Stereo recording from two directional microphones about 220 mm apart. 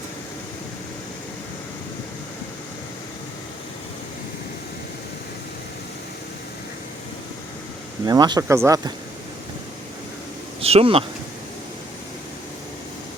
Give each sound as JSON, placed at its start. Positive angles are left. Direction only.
{"t": 8.0, "sound": "speech", "side_deg": -20}
{"t": 10.6, "sound": "speech", "side_deg": -25}